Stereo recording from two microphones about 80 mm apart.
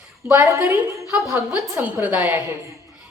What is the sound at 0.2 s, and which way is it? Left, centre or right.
Speech, centre.